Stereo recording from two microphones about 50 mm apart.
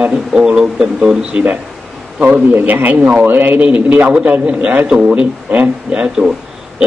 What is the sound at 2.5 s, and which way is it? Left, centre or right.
A man's voice, right.